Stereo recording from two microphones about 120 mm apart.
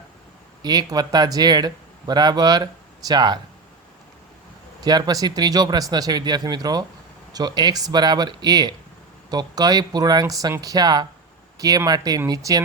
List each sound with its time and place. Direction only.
0.6 s speech: 35° right (ahead or behind)
4.8 s speech: 35° right (ahead or behind)